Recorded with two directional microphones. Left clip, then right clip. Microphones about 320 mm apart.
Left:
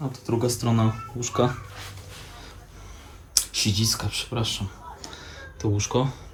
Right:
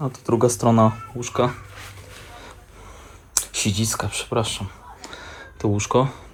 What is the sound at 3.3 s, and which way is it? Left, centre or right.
Speech, centre.